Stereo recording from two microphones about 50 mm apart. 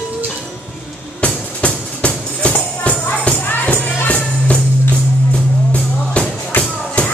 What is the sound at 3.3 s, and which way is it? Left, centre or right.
Music, left.